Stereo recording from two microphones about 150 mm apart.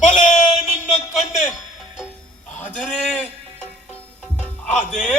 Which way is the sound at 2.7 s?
5° left (ahead or behind).